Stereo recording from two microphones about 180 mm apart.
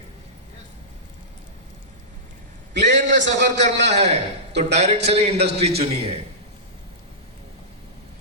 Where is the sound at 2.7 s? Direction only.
75° right (ahead or behind).